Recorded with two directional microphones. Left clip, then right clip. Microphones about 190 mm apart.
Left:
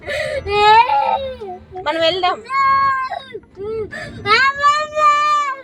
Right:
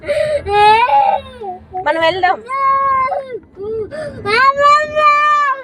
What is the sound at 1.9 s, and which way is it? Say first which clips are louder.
Speech: right 3 dB; 10° left (ahead or behind).